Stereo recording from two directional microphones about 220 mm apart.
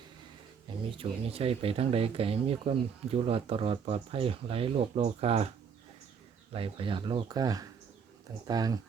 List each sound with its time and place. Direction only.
0.9 s speech: 25° right (ahead or behind)
6.5 s speech: 25° right (ahead or behind)